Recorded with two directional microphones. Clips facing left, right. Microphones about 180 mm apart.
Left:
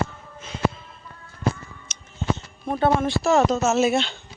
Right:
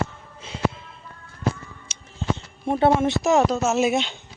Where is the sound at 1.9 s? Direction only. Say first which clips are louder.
Even; 30° right (ahead or behind).